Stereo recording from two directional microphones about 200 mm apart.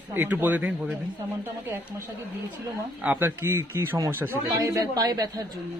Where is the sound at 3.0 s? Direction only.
10° right (ahead or behind).